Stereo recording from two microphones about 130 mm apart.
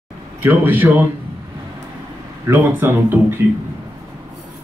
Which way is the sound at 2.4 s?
15° right (ahead or behind).